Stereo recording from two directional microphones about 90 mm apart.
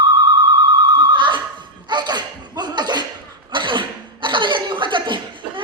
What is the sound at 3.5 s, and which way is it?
Cough, 65° right (ahead or behind).